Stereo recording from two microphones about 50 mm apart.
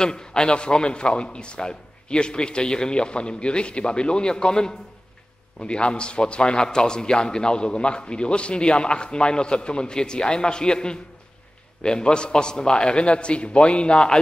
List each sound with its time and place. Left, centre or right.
0.0 s a man's voice: centre